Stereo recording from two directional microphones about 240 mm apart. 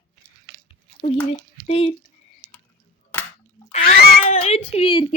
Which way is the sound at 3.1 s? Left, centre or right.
Centre.